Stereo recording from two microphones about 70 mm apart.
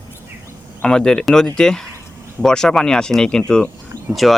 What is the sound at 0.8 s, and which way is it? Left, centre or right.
Speech, centre.